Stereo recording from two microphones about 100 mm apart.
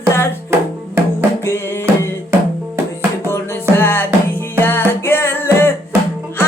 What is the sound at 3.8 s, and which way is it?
Music, 20° left (ahead or behind).